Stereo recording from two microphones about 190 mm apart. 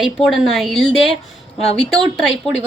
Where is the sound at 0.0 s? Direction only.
Centre (ahead or behind).